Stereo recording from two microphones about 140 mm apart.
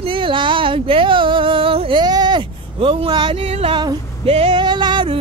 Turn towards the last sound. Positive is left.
turn(degrees=-35)  # may be behind; listen again after turning